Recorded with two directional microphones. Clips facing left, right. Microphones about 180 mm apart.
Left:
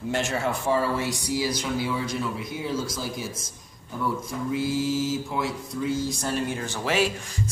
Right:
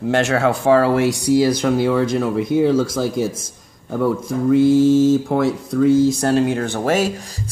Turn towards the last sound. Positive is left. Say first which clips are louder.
# right 7 dB
turn(degrees=-45)  # may be behind; listen again after turning